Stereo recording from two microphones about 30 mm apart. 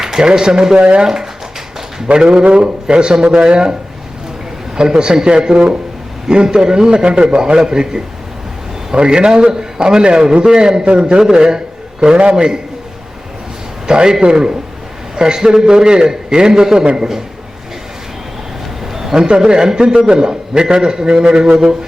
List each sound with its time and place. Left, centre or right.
0.0 s a sound: centre
0.3 s a man's voice: right
0.8 s speech: right
1.0 s speech: centre
2.1 s speech: right
2.5 s a man's voice: right
4.8 s a man's voice: right
10.8 s speech: right
11.2 s a man's voice: right
13.8 s a man's voice: right
16.8 s speech: right
18.9 s a sound: centre
19.4 s a man's voice: right